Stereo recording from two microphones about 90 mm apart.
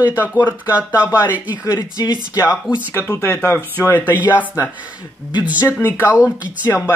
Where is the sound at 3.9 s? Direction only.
20° left (ahead or behind).